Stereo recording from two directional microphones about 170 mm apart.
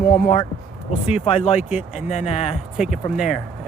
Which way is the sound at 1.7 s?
5° right (ahead or behind).